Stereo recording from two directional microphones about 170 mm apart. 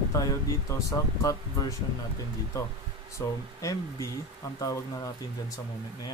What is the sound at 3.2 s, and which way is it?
Speech, 25° left (ahead or behind).